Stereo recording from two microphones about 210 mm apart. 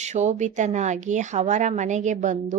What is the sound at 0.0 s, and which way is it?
Speech, 35° right (ahead or behind).